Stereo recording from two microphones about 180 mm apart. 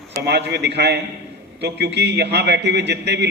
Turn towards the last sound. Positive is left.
turn(degrees=-70)  # may be behind; listen again after turning